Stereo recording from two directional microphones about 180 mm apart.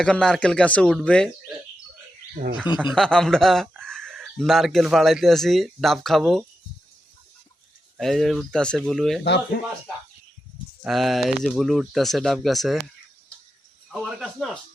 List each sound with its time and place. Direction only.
0.0 s speech: 5° left (ahead or behind)
2.9 s speech: 5° left (ahead or behind)
7.9 s speech: centre (ahead or behind)
9.2 s speech: 70° left (ahead or behind)
10.8 s speech: centre (ahead or behind)
13.9 s speech: centre (ahead or behind)